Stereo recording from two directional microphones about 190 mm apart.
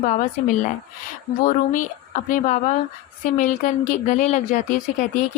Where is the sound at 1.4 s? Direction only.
45° left (ahead or behind).